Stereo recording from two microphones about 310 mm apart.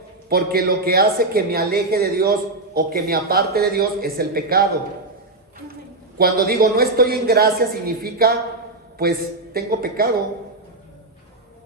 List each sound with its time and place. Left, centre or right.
0.3 s a woman's voice: right
6.1 s a woman's voice: right